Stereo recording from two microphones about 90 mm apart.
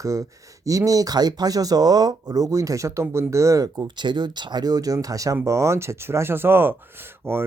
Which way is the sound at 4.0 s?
60° right (ahead or behind).